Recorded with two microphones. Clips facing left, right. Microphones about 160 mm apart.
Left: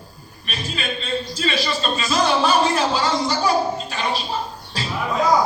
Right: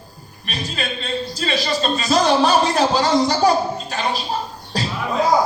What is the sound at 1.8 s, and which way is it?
Speech, 40° right (ahead or behind).